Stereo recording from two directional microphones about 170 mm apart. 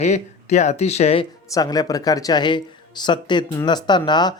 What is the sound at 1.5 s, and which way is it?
Speech, 20° left (ahead or behind).